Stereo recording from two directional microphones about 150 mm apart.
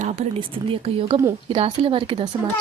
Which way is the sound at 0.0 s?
50° right (ahead or behind).